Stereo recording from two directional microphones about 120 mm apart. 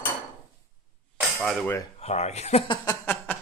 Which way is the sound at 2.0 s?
65° left (ahead or behind).